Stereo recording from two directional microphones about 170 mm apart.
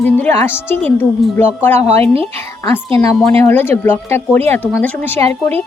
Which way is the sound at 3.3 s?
15° left (ahead or behind).